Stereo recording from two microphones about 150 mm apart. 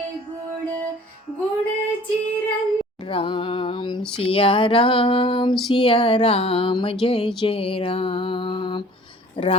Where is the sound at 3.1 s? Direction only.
35° left (ahead or behind).